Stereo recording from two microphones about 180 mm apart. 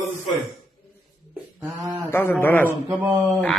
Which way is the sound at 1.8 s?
20° right (ahead or behind).